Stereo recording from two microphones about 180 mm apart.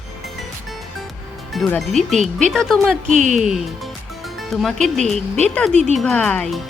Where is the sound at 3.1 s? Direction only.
45° right (ahead or behind).